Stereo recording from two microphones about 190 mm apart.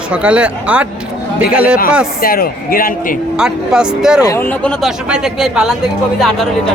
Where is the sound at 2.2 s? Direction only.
50° left (ahead or behind).